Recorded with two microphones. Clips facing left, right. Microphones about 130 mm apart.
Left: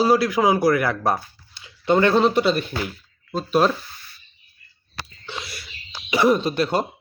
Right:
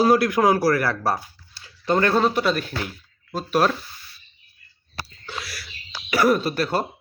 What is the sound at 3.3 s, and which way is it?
Speech, 10° right (ahead or behind).